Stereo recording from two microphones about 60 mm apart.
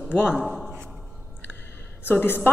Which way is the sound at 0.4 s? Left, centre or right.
Centre.